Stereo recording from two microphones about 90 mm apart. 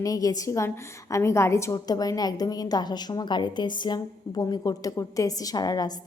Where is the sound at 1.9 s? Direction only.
45° left (ahead or behind).